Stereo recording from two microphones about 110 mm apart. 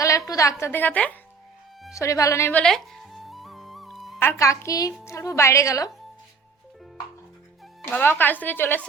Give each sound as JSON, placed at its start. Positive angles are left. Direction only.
{"t": 0.0, "sound": "a sound", "side_deg": 30}
{"t": 0.6, "sound": "a woman's voice", "side_deg": 20}
{"t": 2.0, "sound": "speech", "side_deg": 30}
{"t": 2.5, "sound": "music", "side_deg": 10}
{"t": 4.2, "sound": "speech", "side_deg": 25}
{"t": 7.9, "sound": "a woman's voice", "side_deg": 15}